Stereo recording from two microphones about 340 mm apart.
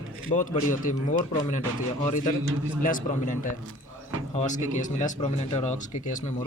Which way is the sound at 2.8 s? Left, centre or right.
Left.